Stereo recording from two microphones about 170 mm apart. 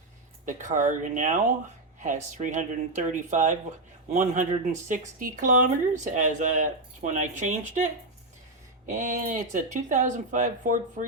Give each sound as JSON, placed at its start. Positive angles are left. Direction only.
{"t": 0.4, "sound": "speech", "side_deg": -45}
{"t": 8.9, "sound": "speech", "side_deg": -50}